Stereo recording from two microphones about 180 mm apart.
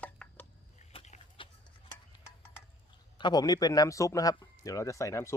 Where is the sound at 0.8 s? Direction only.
35° left (ahead or behind).